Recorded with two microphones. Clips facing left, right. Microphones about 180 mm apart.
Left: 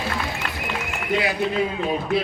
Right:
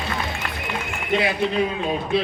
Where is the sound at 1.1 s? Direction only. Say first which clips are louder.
Right 1 dB; 25° right (ahead or behind).